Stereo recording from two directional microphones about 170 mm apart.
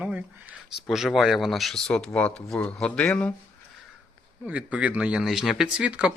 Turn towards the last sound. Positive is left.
turn(degrees=-5)  # may be behind; listen again after turning